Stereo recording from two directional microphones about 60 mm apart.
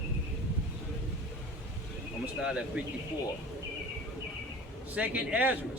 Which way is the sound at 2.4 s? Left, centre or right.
Centre.